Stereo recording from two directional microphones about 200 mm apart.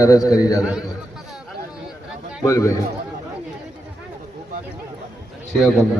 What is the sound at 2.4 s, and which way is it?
Speech, 15° left (ahead or behind).